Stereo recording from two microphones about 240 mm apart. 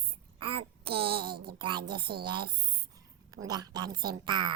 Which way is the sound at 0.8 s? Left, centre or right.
Right.